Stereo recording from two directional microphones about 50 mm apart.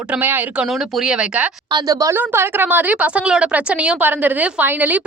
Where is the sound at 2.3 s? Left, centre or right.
Right.